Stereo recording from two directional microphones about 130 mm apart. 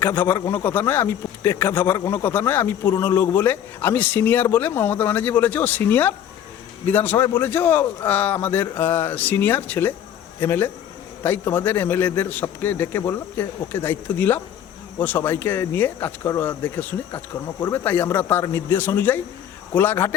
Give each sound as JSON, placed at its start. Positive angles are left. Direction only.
{"t": 0.0, "sound": "a man's voice", "side_deg": 15}